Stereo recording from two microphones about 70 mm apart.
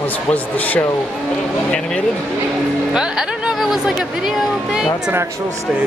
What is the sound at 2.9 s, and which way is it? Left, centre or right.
Speech, centre.